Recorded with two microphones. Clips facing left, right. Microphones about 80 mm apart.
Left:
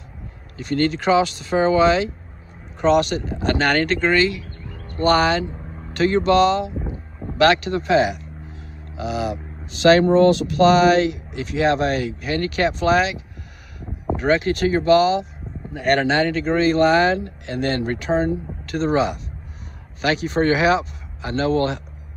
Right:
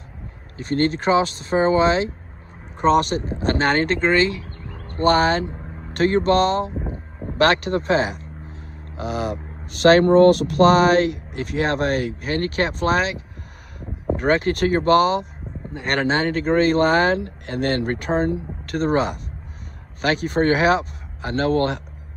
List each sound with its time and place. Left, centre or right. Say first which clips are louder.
0.6 s speech: even; right
5.9 s speech: left 1 dB; right
6.9 s a sound: even; right
10.0 s speech: right 2 dB; right
16.0 s speech: left 1 dB; right